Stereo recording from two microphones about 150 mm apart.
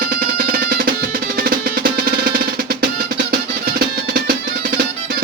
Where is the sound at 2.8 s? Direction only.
90° right.